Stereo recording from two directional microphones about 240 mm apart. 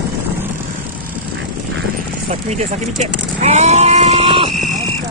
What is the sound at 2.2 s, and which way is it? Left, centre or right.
Speech, right.